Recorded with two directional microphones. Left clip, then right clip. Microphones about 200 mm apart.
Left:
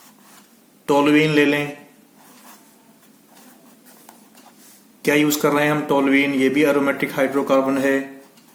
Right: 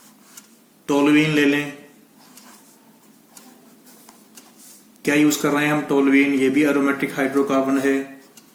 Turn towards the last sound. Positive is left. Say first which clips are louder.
# left 2 dB
turn(degrees=50)  # may be behind; listen again after turning